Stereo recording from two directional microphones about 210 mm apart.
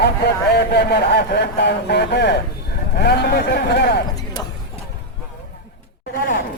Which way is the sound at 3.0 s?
50° left (ahead or behind).